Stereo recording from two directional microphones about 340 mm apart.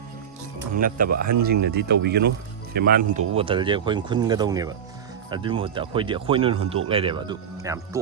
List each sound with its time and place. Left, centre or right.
0.8 s speech: right